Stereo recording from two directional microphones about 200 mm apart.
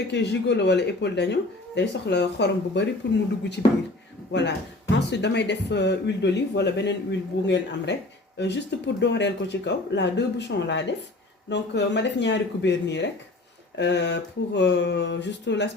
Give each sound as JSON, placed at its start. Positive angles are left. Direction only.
{"t": 0.1, "sound": "speech", "side_deg": 60}
{"t": 4.3, "sound": "speech", "side_deg": 60}